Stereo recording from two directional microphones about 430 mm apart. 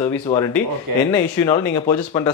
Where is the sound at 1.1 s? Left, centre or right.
Centre.